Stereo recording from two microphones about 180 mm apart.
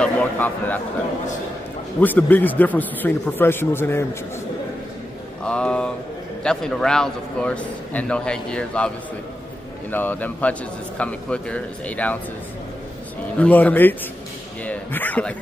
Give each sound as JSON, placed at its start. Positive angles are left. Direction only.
{"t": 0.0, "sound": "speech", "side_deg": 10}
{"t": 2.0, "sound": "a man's voice", "side_deg": 10}
{"t": 5.4, "sound": "a man's voice", "side_deg": 5}
{"t": 13.4, "sound": "a man's voice", "side_deg": 10}